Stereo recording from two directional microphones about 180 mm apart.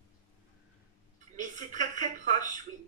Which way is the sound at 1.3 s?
45° right (ahead or behind).